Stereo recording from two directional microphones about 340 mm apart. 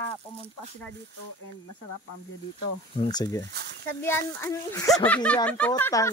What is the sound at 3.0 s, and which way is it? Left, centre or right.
Speech, centre.